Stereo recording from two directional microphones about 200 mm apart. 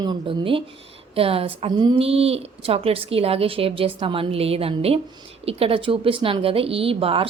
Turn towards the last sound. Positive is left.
turn(degrees=-30)  # may be behind; listen again after turning